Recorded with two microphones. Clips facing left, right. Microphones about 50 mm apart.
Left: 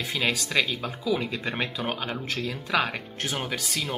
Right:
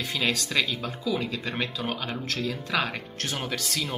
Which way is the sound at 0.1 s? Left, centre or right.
Centre.